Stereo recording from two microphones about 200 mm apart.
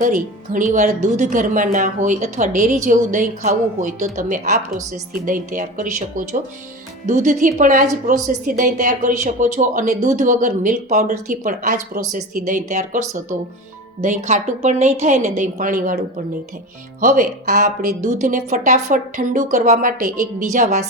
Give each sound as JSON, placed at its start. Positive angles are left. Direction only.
{"t": 0.0, "sound": "speech", "side_deg": -40}